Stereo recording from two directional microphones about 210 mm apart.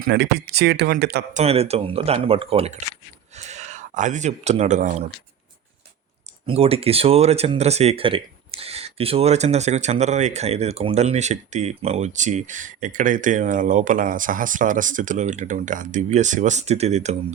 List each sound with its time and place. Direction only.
0.1 s speech: 50° right (ahead or behind)
1.3 s speech: 30° right (ahead or behind)
6.4 s speech: 25° right (ahead or behind)